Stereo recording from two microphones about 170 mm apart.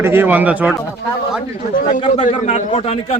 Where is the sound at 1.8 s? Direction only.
50° left (ahead or behind).